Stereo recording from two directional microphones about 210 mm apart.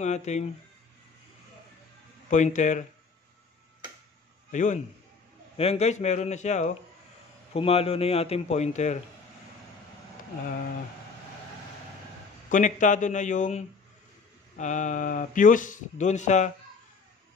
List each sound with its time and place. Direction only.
0.0 s speech: 35° left (ahead or behind)
2.2 s speech: 35° left (ahead or behind)
4.5 s a man's voice: 35° left (ahead or behind)
12.4 s speech: 35° left (ahead or behind)